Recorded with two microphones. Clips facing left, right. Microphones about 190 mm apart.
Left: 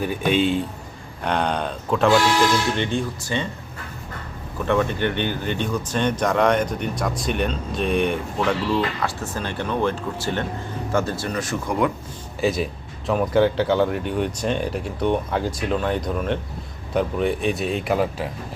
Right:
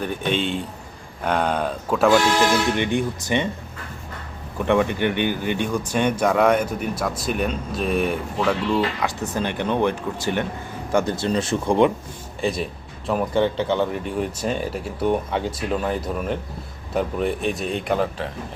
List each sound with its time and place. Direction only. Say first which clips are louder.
0.3 s speech: left 5 dB; 5° left (ahead or behind); by 3.5 s 20° right (ahead or behind)
4.6 s speech: right 2 dB; 15° right (ahead or behind)
9.0 s speech: right 2 dB; 15° right (ahead or behind)
12.4 s speech: left 2 dB; centre (ahead or behind)